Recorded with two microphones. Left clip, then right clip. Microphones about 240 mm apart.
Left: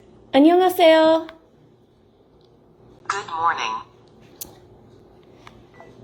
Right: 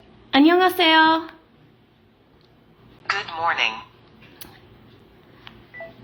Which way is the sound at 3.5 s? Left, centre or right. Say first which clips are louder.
Right 2 dB; centre.